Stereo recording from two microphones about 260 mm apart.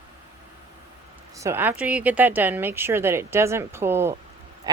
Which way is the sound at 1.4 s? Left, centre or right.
Centre.